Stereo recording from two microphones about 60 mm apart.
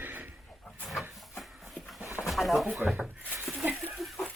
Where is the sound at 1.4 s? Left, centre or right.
Centre.